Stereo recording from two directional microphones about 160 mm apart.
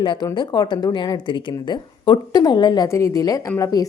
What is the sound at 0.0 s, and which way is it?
Speech, 25° left (ahead or behind).